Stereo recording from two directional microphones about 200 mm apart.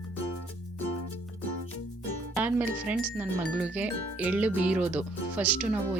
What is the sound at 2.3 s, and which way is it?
Speech, 10° right (ahead or behind).